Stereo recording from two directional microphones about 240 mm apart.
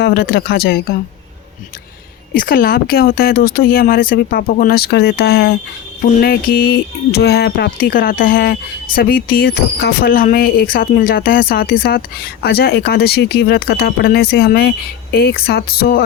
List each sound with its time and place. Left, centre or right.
0.0 s speech: left
2.3 s speech: left